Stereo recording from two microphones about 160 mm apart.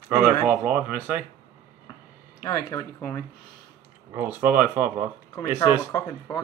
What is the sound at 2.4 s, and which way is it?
Speech, 20° left (ahead or behind).